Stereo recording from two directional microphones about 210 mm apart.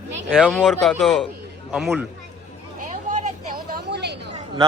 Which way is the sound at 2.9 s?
35° right (ahead or behind).